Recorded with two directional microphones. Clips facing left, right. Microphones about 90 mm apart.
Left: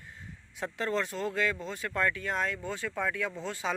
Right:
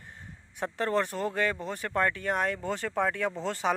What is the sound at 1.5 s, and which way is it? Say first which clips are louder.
Speech: right 2 dB; 55° right (ahead or behind).